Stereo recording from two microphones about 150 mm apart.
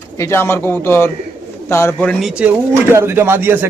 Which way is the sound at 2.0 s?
5° right (ahead or behind).